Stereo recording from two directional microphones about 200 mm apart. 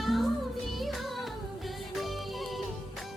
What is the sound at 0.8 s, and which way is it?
Music of bollywood, centre (ahead or behind).